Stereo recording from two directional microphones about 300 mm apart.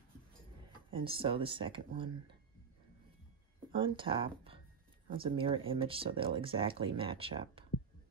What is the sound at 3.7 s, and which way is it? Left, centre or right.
Speech, centre.